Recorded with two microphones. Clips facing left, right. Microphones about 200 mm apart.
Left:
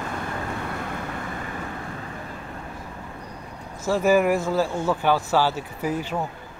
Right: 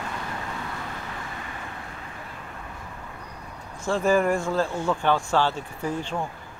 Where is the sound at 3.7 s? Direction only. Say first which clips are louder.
Left 2 dB; 5° left (ahead or behind).